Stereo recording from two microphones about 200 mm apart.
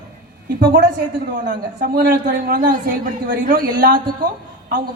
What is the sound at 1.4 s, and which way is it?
A man's voice, 40° right (ahead or behind).